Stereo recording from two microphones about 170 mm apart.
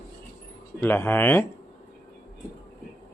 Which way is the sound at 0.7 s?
15° left (ahead or behind).